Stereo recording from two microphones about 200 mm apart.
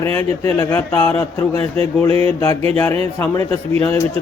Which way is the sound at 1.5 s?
30° right (ahead or behind).